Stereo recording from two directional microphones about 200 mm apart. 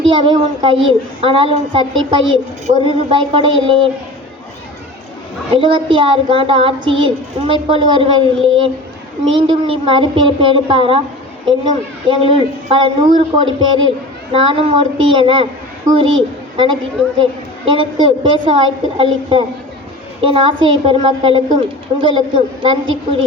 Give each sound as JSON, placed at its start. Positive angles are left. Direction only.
{"t": 0.0, "sound": "a child's voice", "side_deg": -25}
{"t": 5.5, "sound": "a woman's voice", "side_deg": -25}
{"t": 22.6, "sound": "a woman's voice", "side_deg": -25}